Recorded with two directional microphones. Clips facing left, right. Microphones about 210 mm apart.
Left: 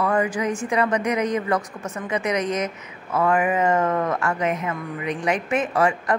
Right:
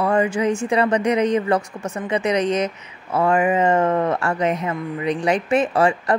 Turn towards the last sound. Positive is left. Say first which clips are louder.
# right 3 dB
turn(degrees=-30)  # may be behind; listen again after turning